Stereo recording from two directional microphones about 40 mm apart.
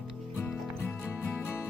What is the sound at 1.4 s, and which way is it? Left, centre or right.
Music, left.